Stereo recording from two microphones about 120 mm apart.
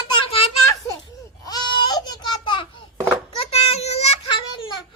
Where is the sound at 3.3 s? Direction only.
55° left (ahead or behind).